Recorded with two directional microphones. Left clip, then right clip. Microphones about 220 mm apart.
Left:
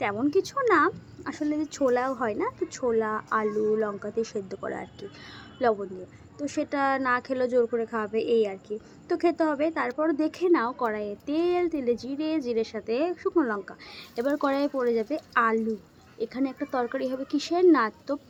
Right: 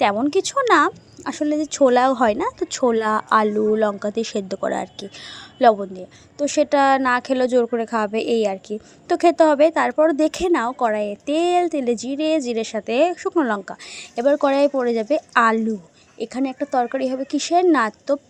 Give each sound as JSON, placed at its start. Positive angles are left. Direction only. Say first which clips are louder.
{"t": 0.0, "sound": "speech", "louder": "right 7 dB", "side_deg": -40}